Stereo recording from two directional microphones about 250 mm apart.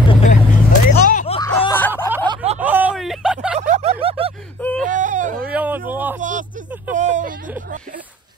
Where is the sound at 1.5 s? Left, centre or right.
Centre.